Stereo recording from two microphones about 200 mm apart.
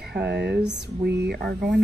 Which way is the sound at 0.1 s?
55° right (ahead or behind).